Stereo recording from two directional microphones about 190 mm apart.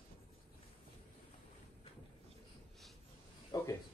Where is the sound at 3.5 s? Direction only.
20° left (ahead or behind).